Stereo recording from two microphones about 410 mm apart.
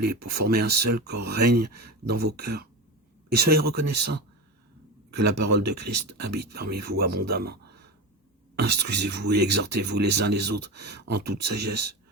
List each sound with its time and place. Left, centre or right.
0.0 s speech: right